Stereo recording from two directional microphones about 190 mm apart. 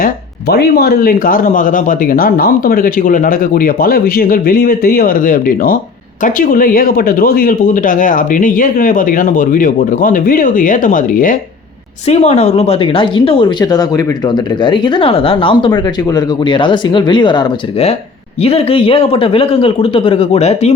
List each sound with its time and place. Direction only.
0.0 s speech: 55° left (ahead or behind)
12.0 s speech: 35° left (ahead or behind)